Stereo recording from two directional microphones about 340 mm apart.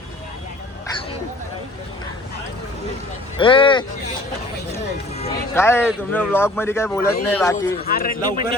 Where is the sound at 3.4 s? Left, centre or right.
Centre.